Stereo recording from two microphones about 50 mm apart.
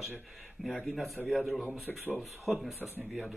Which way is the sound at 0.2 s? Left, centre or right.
Centre.